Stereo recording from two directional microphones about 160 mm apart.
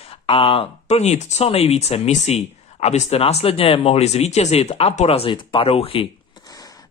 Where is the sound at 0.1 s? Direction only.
35° left (ahead or behind).